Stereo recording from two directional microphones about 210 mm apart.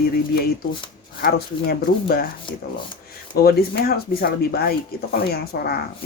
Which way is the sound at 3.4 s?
50° left (ahead or behind).